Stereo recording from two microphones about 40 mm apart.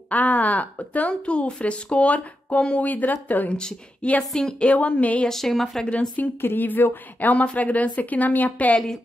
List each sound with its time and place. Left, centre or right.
0.1 s a woman's voice: left
2.8 s speech: left
4.3 s speech: centre
4.6 s a woman's voice: left
5.3 s speech: centre
5.9 s a woman's voice: left
6.4 s speech: left
7.2 s a woman's voice: left